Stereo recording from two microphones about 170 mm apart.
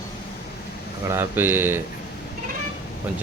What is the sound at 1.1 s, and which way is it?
Speech, 15° right (ahead or behind).